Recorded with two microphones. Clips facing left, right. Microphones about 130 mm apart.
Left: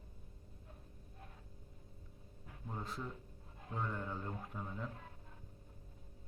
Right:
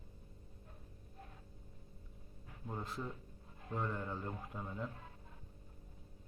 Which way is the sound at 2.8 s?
Centre (ahead or behind).